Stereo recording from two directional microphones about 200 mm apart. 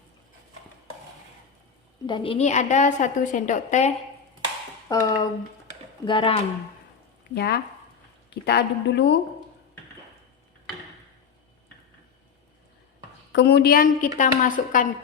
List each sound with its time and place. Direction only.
2.0 s a woman's voice: 25° left (ahead or behind)
4.9 s speech: 15° left (ahead or behind)
7.3 s a woman's voice: 55° left (ahead or behind)
13.3 s a woman's voice: 55° left (ahead or behind); by 14.8 s 40° left (ahead or behind)